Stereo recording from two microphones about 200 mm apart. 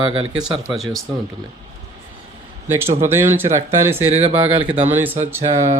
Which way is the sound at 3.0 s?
10° right (ahead or behind).